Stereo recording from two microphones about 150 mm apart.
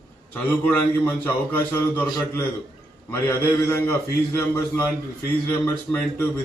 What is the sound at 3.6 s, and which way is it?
A man's voice, 15° left (ahead or behind).